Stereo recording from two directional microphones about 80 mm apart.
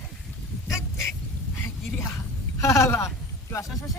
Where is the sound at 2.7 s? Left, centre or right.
Left.